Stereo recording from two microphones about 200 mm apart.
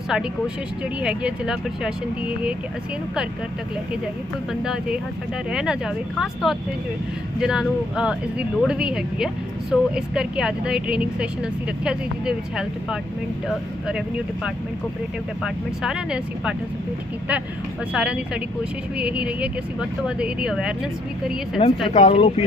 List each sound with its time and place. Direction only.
0.1 s speech: 5° right (ahead or behind)
4.6 s speech: centre (ahead or behind)
15.4 s speech: centre (ahead or behind)
17.9 s speech: 5° right (ahead or behind)
21.8 s speech: 30° left (ahead or behind)